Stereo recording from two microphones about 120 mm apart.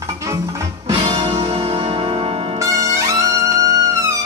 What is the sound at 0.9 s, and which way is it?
Music, 40° right (ahead or behind).